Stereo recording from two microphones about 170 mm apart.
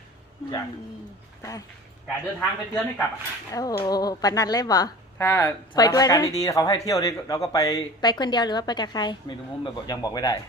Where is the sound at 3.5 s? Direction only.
20° left (ahead or behind).